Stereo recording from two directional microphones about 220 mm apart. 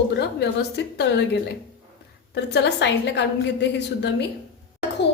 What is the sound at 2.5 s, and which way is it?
A woman's voice, 50° left (ahead or behind).